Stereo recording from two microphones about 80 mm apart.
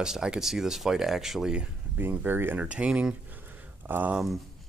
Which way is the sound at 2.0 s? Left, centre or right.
Right.